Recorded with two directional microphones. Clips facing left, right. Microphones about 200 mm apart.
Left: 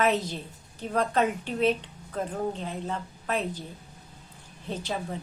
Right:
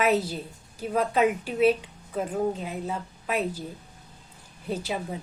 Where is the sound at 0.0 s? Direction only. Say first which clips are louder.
Right 2 dB; 10° right (ahead or behind).